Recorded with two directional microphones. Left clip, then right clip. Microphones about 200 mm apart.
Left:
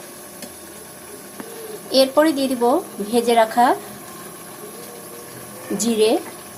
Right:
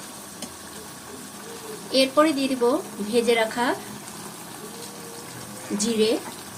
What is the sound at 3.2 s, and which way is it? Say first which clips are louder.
Speech: left 6 dB; 15° left (ahead or behind).